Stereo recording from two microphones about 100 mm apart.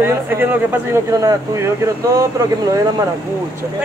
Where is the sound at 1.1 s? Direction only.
35° right (ahead or behind).